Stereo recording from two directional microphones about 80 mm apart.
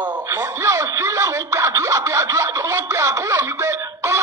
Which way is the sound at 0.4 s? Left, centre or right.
Right.